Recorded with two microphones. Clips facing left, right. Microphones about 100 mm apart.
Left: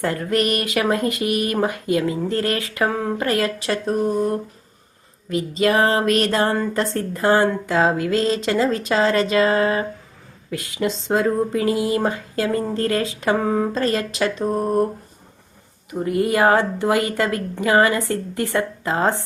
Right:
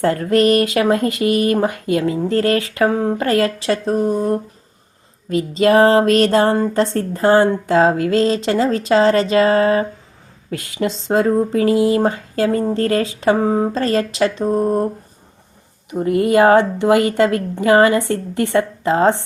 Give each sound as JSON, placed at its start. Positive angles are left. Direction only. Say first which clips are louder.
{"t": 0.0, "sound": "a woman's voice", "louder": "right 6 dB", "side_deg": -30}
{"t": 15.9, "sound": "a woman's voice", "louder": "right 4 dB", "side_deg": -20}